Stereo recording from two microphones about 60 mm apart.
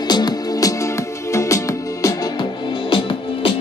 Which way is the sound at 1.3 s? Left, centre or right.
Left.